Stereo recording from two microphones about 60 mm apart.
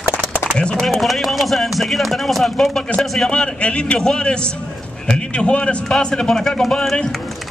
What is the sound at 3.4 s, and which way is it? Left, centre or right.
A man's voice, centre.